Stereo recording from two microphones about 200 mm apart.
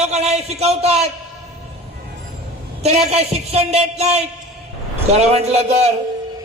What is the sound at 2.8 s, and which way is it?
A man's voice, 30° right (ahead or behind).